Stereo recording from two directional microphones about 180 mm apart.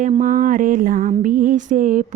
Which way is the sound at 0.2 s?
45° right (ahead or behind).